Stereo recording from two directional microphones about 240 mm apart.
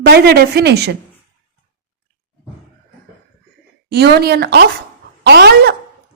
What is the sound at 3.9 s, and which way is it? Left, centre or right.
A woman's voice, right.